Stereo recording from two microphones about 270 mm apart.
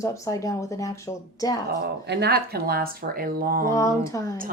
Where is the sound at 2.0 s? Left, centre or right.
Right.